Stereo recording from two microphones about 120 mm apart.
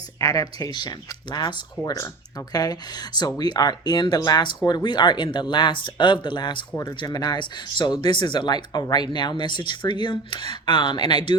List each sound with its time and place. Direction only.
0.2 s speech: 30° left (ahead or behind)